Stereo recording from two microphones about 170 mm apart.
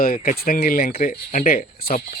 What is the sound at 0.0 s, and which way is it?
Speech, 55° left (ahead or behind).